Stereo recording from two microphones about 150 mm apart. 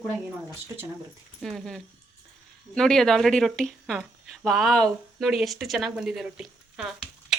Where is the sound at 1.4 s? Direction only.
Centre (ahead or behind).